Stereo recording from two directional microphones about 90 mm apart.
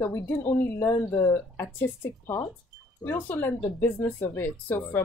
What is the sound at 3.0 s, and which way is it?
A woman's voice, 20° left (ahead or behind).